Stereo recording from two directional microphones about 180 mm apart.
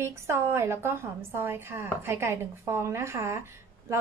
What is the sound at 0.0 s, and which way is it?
Speech, 15° right (ahead or behind).